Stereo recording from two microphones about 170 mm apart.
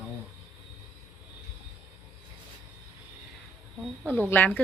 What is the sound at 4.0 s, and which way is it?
Speech, 5° left (ahead or behind).